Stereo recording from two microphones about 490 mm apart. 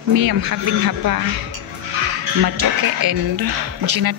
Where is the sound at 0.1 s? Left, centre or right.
Right.